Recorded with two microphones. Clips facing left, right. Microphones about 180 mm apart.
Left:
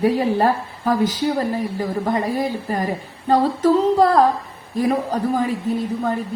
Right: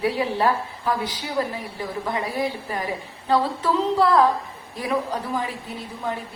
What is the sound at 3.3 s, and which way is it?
A woman's voice, 45° left (ahead or behind).